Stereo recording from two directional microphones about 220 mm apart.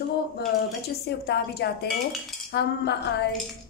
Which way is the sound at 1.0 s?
45° left (ahead or behind).